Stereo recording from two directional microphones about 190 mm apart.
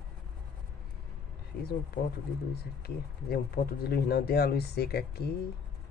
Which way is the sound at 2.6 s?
55° left (ahead or behind).